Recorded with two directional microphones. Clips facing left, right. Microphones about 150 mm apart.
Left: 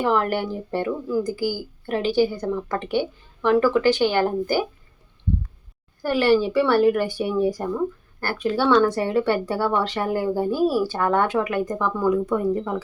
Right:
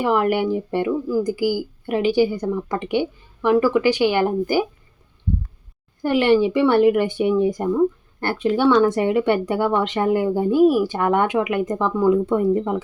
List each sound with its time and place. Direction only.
0.0 s a woman's voice: 10° right (ahead or behind)
6.0 s speech: 20° right (ahead or behind)